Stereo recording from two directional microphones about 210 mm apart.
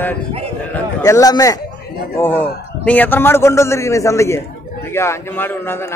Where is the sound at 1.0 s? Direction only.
15° left (ahead or behind).